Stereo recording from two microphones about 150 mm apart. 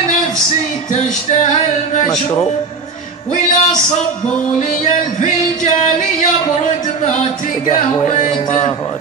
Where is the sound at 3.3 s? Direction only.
50° left (ahead or behind).